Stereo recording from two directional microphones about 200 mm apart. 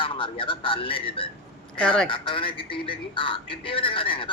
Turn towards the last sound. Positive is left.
turn(degrees=25)  # may be behind; listen again after turning